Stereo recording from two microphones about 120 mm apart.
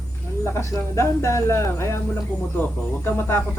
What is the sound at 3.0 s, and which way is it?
Speech, 20° left (ahead or behind).